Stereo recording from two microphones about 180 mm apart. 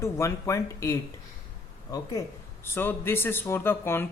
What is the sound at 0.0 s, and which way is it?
Speech, 15° left (ahead or behind).